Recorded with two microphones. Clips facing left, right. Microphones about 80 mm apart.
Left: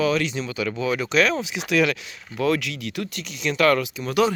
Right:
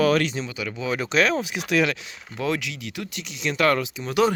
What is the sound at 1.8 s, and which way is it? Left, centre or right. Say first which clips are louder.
Speech: left 2 dB; right.